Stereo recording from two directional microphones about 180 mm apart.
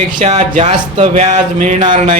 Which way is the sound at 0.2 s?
40° right (ahead or behind).